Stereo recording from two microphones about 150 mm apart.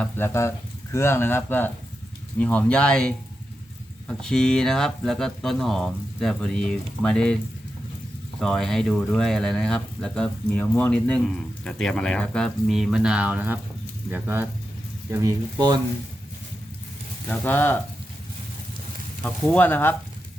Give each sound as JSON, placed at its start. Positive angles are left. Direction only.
{"t": 0.0, "sound": "speech", "side_deg": 15}
{"t": 4.2, "sound": "speech", "side_deg": 5}
{"t": 8.4, "sound": "speech", "side_deg": 0}
{"t": 17.2, "sound": "speech", "side_deg": 15}
{"t": 19.2, "sound": "speech", "side_deg": 10}